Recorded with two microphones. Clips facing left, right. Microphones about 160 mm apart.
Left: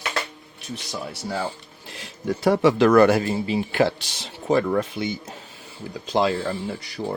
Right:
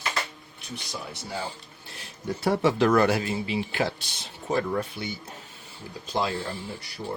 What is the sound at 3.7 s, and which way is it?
Speech, 75° left (ahead or behind).